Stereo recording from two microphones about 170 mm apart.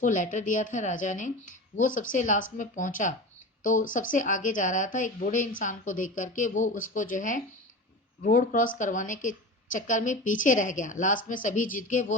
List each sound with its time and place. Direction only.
0.0 s a woman's voice: 50° left (ahead or behind)